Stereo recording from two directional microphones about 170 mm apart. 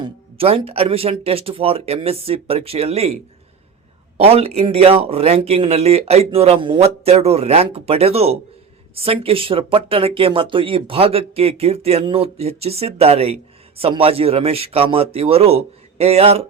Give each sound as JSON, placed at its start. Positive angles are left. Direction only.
{"t": 0.0, "sound": "speech", "side_deg": -35}
{"t": 4.2, "sound": "speech", "side_deg": -35}